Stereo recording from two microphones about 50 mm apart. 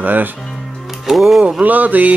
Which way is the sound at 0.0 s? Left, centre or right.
Right.